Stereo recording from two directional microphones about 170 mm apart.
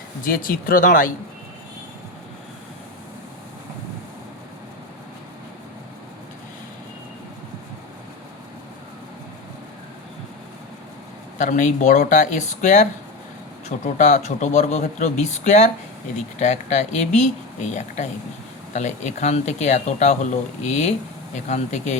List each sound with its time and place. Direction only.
0.3 s speech: 60° left (ahead or behind)
11.3 s speech: 50° left (ahead or behind)